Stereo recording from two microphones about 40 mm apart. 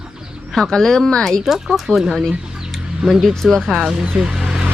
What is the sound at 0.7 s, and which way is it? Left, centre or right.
Speech, centre.